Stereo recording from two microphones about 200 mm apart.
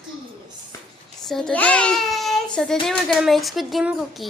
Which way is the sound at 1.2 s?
Centre (ahead or behind).